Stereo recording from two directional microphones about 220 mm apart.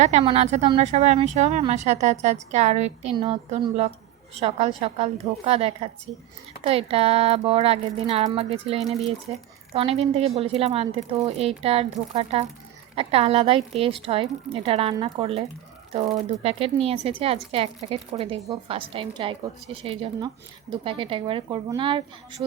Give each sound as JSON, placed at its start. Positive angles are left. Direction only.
{"t": 0.0, "sound": "a woman's voice", "side_deg": -30}